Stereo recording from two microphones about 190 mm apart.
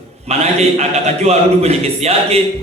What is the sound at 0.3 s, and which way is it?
A man's voice, 35° right (ahead or behind).